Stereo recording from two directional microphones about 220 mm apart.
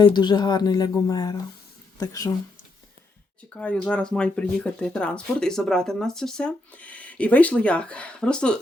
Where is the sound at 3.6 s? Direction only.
5° left (ahead or behind).